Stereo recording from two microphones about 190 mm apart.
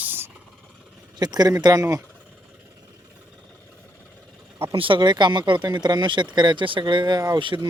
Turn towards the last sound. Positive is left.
turn(degrees=-25)  # may be behind; listen again after turning